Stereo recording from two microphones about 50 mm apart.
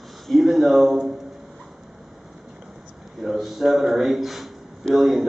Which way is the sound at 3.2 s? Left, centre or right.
Centre.